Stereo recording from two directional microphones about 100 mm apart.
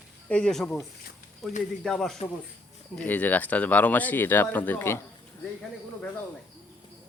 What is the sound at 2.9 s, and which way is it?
Speech, 15° left (ahead or behind).